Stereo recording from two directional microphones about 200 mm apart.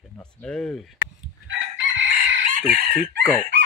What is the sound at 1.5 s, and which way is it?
Chicken, 70° right (ahead or behind).